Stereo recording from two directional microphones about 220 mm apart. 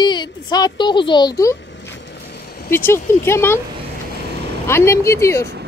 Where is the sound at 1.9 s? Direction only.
50° left (ahead or behind).